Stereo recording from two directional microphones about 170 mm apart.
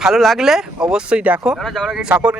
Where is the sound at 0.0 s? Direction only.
Centre (ahead or behind).